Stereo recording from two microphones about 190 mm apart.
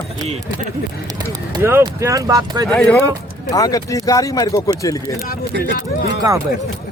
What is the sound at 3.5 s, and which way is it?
Speech, 20° left (ahead or behind).